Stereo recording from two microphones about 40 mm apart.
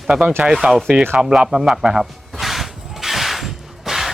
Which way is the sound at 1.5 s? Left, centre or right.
Centre.